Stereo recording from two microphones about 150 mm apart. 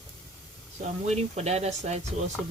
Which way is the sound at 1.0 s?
45° right (ahead or behind).